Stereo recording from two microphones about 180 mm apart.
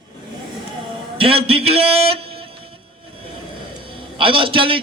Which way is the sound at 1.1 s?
30° right (ahead or behind).